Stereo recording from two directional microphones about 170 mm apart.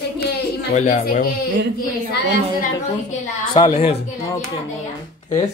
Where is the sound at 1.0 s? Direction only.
55° left (ahead or behind).